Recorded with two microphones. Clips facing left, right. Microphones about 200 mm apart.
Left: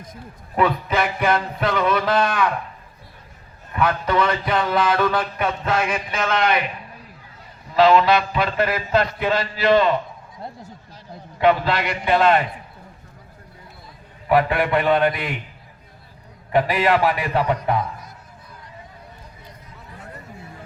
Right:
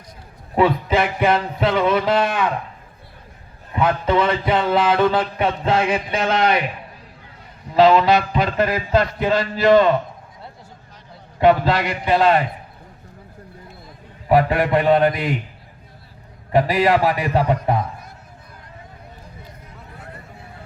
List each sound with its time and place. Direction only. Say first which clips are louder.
0.5 s speech: right 3 dB; 25° right (ahead or behind)
3.7 s a man's voice: right 2 dB; 25° right (ahead or behind)
7.8 s a man's voice: right 2 dB; 30° right (ahead or behind); by 9.8 s 45° right (ahead or behind)
11.3 s a man's voice: right 3 dB; 40° right (ahead or behind)
14.3 s a man's voice: right 2 dB; 35° right (ahead or behind)
16.5 s a man's voice: right 2 dB; 35° right (ahead or behind)